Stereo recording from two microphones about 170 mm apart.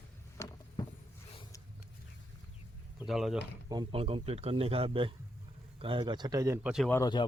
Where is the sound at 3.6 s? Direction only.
25° right (ahead or behind).